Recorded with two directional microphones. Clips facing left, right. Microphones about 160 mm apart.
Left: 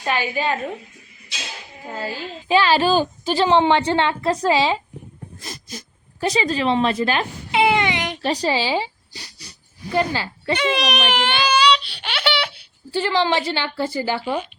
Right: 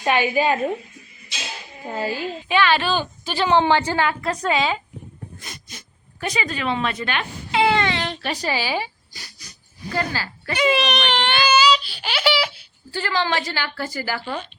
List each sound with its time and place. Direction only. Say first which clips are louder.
0.0 s a woman's voice: right 3 dB; 15° right (ahead or behind)
1.9 s a woman's voice: right 3 dB; 15° right (ahead or behind)
2.5 s a woman's voice: left 3 dB; 35° left (ahead or behind)
7.5 s baby cry: left 1 dB; 20° left (ahead or behind)
8.2 s speech: left 4 dB; 35° left (ahead or behind)
10.6 s baby cry: right 4 dB; 5° right (ahead or behind)
12.9 s a woman's voice: left 4 dB; 20° left (ahead or behind)